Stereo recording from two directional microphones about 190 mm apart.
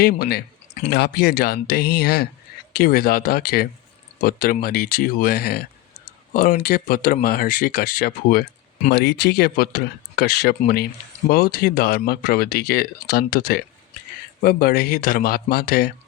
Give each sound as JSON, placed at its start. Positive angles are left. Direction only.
{"t": 0.0, "sound": "speech", "side_deg": 55}